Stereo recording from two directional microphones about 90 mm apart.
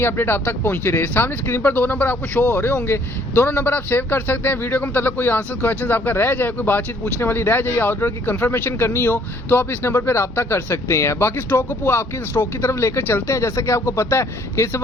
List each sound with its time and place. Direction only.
0.0 s a man's voice: 25° left (ahead or behind)